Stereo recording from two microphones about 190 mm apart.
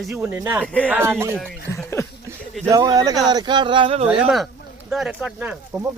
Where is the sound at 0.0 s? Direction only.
Centre (ahead or behind).